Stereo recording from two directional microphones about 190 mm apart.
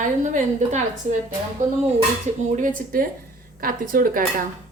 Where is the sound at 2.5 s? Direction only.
45° right (ahead or behind).